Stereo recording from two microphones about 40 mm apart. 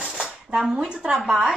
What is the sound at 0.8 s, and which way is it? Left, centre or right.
Speech, right.